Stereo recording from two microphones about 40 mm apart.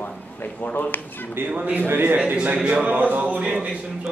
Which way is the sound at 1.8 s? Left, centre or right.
Right.